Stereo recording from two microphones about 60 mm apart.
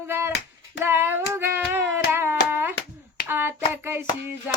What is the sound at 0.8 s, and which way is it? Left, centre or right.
Hands, right.